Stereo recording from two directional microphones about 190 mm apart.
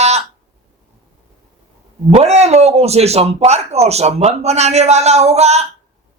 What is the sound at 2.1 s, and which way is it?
Speech, 35° right (ahead or behind).